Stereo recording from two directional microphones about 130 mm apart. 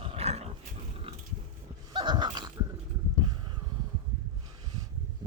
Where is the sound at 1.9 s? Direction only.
35° right (ahead or behind).